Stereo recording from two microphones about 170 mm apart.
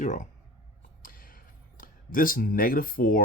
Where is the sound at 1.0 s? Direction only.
55° left (ahead or behind).